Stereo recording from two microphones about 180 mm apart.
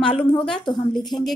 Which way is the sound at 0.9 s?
Centre (ahead or behind).